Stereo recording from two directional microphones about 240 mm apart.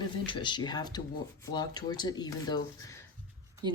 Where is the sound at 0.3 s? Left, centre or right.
Centre.